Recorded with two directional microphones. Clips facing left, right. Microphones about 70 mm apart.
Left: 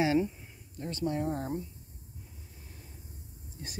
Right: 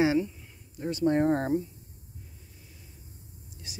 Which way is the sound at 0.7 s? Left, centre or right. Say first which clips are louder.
Right 6 dB; centre.